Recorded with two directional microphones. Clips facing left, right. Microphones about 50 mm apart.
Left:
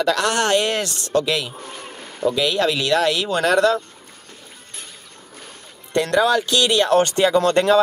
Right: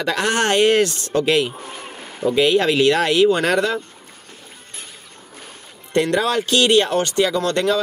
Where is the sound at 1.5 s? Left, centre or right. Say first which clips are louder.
Right 1 dB; right.